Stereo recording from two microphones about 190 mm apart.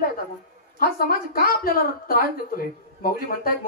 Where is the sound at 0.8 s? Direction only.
50° left (ahead or behind).